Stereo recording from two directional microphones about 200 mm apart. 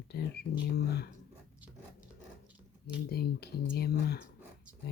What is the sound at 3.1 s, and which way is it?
Speech, 50° left (ahead or behind).